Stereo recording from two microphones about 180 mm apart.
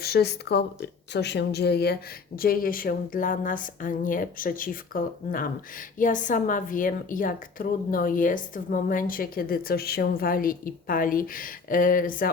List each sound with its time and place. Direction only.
0.0 s speech: 60° left (ahead or behind)